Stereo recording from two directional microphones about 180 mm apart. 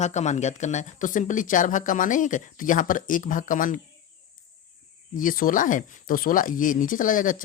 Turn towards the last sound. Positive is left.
turn(degrees=50)  # may be behind; listen again after turning